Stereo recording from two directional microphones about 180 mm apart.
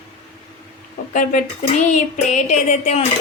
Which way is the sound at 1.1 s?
45° left (ahead or behind).